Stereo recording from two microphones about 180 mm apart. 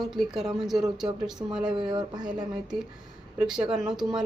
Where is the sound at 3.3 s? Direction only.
5° right (ahead or behind).